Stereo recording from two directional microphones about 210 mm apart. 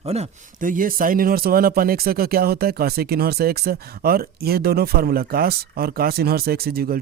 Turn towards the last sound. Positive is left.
turn(degrees=-45)  # may be behind; listen again after turning